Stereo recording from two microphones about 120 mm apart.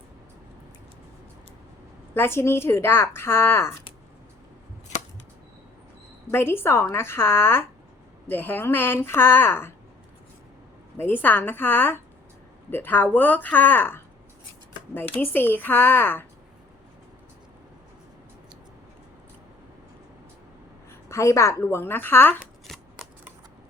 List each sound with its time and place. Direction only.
2.1 s speech: 20° left (ahead or behind)
6.3 s speech: 20° left (ahead or behind)
10.9 s speech: 15° left (ahead or behind)
15.2 s speech: 15° left (ahead or behind)
21.1 s speech: 25° left (ahead or behind)
22.6 s shuffling cards: centre (ahead or behind)